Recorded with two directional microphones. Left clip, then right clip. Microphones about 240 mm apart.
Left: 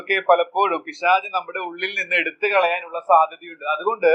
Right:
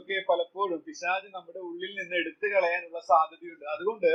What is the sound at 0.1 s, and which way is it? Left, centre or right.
Speech, centre.